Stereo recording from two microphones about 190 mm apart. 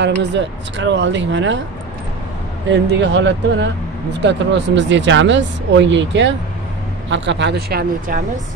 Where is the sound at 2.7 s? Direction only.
65° right (ahead or behind).